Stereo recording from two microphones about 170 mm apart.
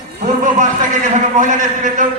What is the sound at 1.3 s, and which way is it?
Speech, 50° right (ahead or behind).